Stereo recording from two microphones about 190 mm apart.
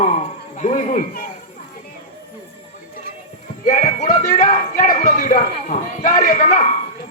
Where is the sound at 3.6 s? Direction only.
40° left (ahead or behind).